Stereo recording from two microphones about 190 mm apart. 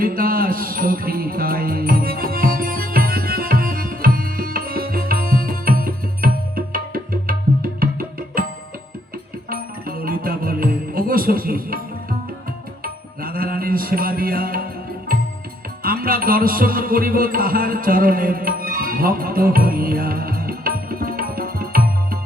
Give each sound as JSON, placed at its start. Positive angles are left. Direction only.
{"t": 0.0, "sound": "music", "side_deg": -50}
{"t": 9.5, "sound": "music", "side_deg": -50}
{"t": 12.8, "sound": "music", "side_deg": -50}
{"t": 15.8, "sound": "music", "side_deg": -50}